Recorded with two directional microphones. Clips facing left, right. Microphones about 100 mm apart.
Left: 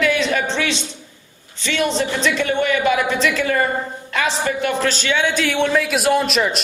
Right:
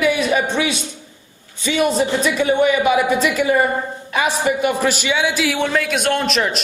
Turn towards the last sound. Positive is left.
turn(degrees=0)  # may be behind; listen again after turning